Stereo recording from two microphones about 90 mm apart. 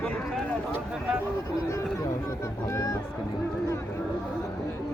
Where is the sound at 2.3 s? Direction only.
35° left (ahead or behind).